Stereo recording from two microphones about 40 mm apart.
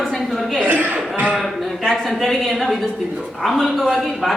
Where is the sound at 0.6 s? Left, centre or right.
Right.